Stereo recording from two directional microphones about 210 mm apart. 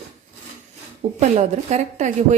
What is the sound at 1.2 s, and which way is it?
Speech, 30° right (ahead or behind).